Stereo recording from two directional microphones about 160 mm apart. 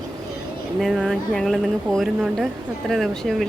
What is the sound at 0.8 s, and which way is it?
Speech, centre (ahead or behind).